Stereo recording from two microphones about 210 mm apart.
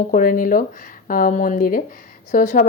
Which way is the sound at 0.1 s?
40° left (ahead or behind).